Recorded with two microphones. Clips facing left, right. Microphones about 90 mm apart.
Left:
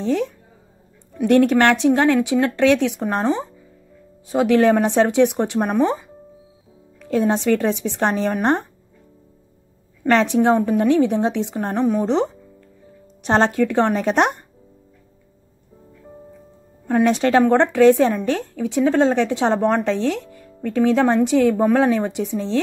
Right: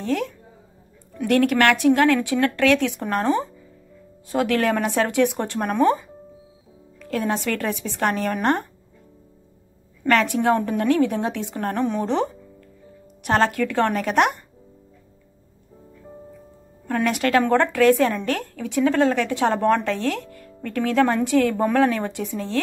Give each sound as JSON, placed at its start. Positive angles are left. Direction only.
{"t": 0.0, "sound": "a woman's voice", "side_deg": 20}
{"t": 10.0, "sound": "speech", "side_deg": 20}
{"t": 11.8, "sound": "speech", "side_deg": 5}
{"t": 12.1, "sound": "music", "side_deg": 20}
{"t": 13.2, "sound": "speech", "side_deg": 25}
{"t": 16.8, "sound": "speech", "side_deg": 25}